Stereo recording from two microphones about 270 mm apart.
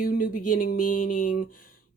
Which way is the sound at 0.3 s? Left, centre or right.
Left.